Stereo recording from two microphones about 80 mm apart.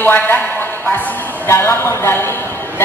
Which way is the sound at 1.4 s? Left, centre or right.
Left.